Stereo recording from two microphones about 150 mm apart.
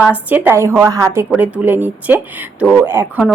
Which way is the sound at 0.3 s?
15° right (ahead or behind).